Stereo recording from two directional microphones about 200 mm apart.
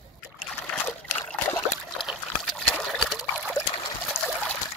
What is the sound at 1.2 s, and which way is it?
Trickle, 10° left (ahead or behind).